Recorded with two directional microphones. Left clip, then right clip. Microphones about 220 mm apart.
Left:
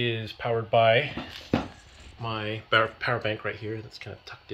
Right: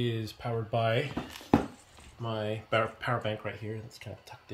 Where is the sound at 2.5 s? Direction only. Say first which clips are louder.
Left 7 dB; 35° left (ahead or behind).